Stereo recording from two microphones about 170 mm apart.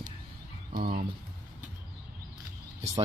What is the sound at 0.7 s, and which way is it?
Speech, 65° right (ahead or behind).